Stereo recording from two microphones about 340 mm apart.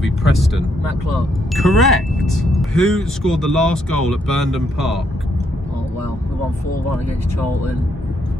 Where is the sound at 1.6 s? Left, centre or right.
Centre.